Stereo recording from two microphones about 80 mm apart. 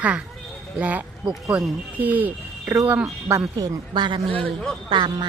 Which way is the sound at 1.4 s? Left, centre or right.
Centre.